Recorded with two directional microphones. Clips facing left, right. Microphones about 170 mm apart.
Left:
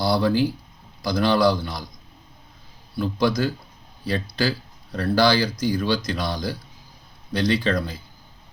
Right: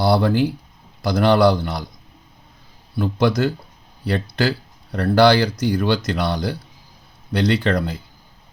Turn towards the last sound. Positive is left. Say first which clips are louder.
# right 3 dB
turn(degrees=-65)  # may be behind; listen again after turning